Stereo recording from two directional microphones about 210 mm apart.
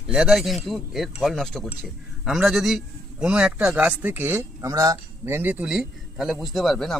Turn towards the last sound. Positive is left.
turn(degrees=0)  # may be behind; listen again after turning